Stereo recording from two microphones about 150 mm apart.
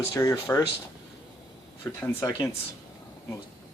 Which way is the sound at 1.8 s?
25° left (ahead or behind).